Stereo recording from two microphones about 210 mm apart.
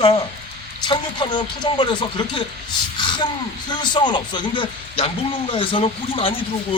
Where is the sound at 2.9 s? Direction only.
20° left (ahead or behind).